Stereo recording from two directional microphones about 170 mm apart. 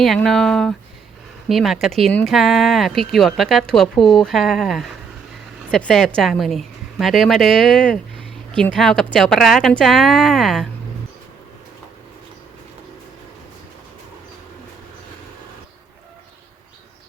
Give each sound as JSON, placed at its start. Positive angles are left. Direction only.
{"t": 0.0, "sound": "a woman's voice", "side_deg": 0}